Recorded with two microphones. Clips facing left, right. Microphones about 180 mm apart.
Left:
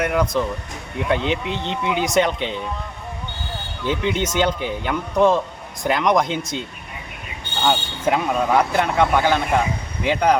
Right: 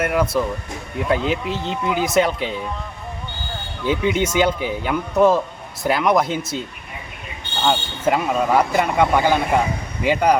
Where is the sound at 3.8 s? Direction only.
10° right (ahead or behind).